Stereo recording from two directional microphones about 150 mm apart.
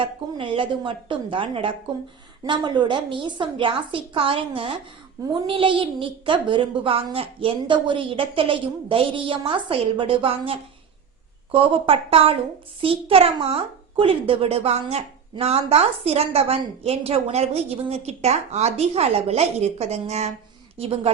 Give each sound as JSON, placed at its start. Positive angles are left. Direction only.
{"t": 0.0, "sound": "a woman's voice", "side_deg": -35}